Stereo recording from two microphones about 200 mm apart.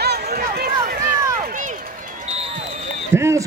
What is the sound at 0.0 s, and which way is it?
Run, 55° right (ahead or behind).